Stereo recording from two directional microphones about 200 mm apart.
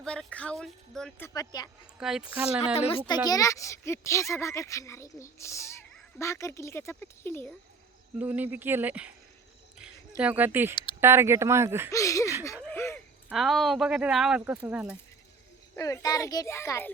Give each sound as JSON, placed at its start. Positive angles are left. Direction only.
{"t": 0.0, "sound": "speech", "side_deg": 5}
{"t": 1.3, "sound": "speech", "side_deg": 20}
{"t": 2.0, "sound": "speech", "side_deg": -5}
{"t": 2.7, "sound": "speech", "side_deg": 30}
{"t": 3.1, "sound": "speech", "side_deg": 20}
{"t": 8.2, "sound": "speech", "side_deg": -10}
{"t": 10.2, "sound": "speech", "side_deg": -5}
{"t": 11.9, "sound": "speech", "side_deg": 15}
{"t": 12.7, "sound": "a sound", "side_deg": 10}
{"t": 13.2, "sound": "speech", "side_deg": 0}
{"t": 15.7, "sound": "speech", "side_deg": 15}